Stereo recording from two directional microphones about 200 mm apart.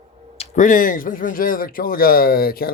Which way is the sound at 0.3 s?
40° left (ahead or behind).